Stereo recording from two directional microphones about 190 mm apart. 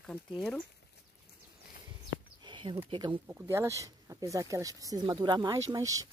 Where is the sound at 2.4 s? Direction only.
25° right (ahead or behind).